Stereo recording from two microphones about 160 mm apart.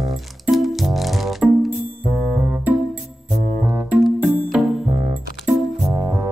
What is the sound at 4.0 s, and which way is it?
Music, centre (ahead or behind).